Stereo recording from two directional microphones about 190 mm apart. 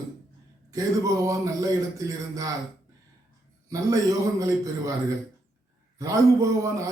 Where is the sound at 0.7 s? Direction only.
15° right (ahead or behind).